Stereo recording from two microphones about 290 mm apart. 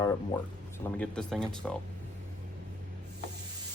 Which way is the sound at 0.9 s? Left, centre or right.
Centre.